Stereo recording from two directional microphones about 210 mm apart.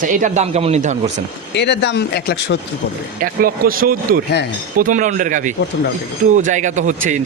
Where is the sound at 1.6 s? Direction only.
55° left (ahead or behind).